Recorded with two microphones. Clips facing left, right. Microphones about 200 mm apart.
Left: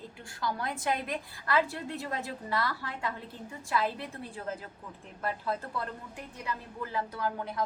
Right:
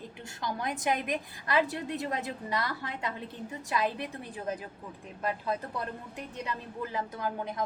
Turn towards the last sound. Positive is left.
turn(degrees=-20)  # may be behind; listen again after turning